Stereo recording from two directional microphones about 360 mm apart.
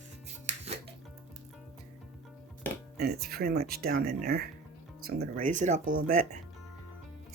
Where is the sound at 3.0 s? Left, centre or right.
Right.